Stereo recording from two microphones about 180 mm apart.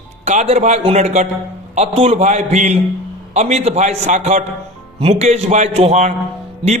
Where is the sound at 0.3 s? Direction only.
40° right (ahead or behind).